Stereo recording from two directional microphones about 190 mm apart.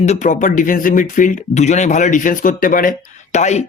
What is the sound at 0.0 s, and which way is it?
Speech, 40° left (ahead or behind).